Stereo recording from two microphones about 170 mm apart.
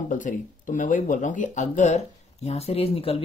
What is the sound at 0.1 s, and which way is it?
Speech, 50° left (ahead or behind).